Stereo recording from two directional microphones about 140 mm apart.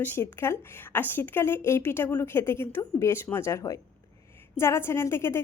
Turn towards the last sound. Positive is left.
turn(degrees=20)  # may be behind; listen again after turning